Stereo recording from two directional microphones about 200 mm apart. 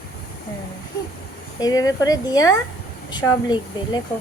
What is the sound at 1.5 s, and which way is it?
Speech, 20° left (ahead or behind).